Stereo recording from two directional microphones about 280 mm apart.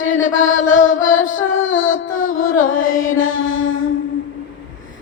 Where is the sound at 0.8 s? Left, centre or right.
Left.